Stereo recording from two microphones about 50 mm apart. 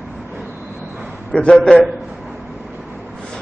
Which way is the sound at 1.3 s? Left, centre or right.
Left.